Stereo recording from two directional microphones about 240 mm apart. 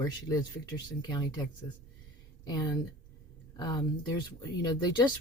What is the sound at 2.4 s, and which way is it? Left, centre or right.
Speech, centre.